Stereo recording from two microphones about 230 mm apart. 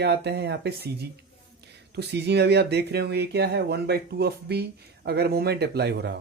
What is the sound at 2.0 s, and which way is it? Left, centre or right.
Speech, right.